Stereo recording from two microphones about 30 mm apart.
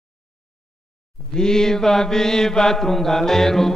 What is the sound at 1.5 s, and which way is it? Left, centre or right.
Mantra, centre.